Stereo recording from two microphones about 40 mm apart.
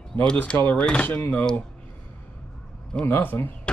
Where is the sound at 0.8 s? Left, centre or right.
Left.